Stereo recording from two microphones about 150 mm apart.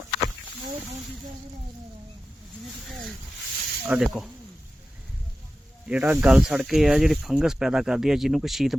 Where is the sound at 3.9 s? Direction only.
5° right (ahead or behind).